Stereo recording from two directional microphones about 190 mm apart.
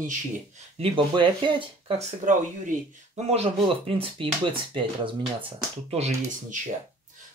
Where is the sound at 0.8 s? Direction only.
25° right (ahead or behind).